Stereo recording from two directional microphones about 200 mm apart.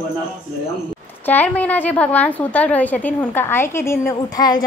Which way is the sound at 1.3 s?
10° left (ahead or behind).